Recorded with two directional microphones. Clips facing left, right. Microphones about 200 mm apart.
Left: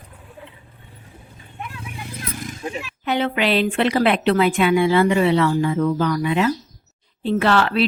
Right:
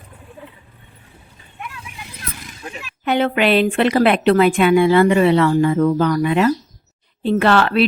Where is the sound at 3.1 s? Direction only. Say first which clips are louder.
Right 4 dB; 55° right (ahead or behind).